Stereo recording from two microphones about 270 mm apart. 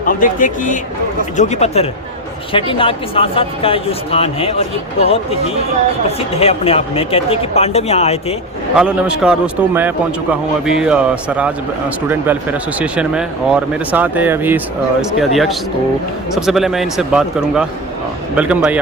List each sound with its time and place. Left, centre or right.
0.0 s speech: left
6.1 s speech: left
8.7 s a man's voice: centre